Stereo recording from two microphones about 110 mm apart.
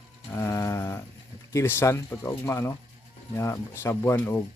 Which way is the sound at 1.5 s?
20° left (ahead or behind).